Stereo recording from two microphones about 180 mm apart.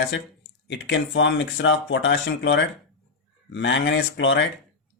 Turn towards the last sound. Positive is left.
turn(degrees=80)